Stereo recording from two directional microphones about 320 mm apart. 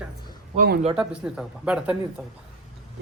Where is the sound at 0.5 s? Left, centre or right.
Right.